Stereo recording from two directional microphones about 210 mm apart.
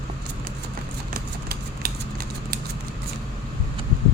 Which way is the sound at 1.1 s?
45° right (ahead or behind).